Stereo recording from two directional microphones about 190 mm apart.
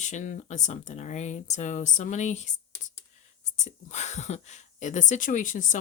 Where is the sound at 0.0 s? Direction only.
40° left (ahead or behind).